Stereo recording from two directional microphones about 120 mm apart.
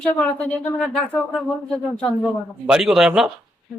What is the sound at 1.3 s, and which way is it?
Speech, centre (ahead or behind).